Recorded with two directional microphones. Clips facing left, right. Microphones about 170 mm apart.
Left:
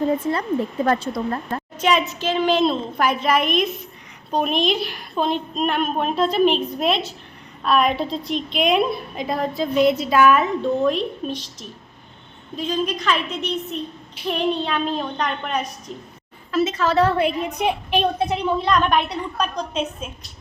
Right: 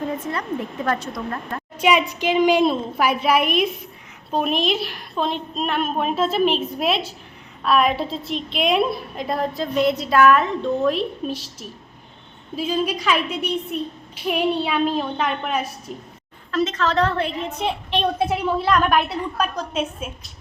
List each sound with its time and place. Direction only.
0.9 s speech: 30° left (ahead or behind)
1.8 s a woman's voice: 10° right (ahead or behind)
12.5 s a woman's voice: 5° right (ahead or behind)
16.5 s a woman's voice: 5° left (ahead or behind)
18.2 s a woman's voice: 5° right (ahead or behind)